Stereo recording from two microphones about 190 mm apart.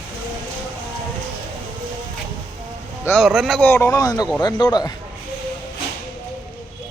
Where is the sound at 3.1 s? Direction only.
Centre (ahead or behind); by 4.9 s 20° left (ahead or behind).